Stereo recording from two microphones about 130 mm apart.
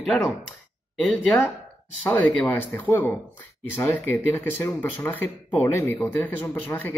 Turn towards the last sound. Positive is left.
turn(degrees=15)  # may be behind; listen again after turning